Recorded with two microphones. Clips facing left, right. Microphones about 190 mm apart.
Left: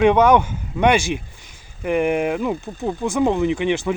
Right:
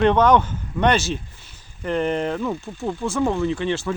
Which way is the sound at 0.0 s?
10° left (ahead or behind).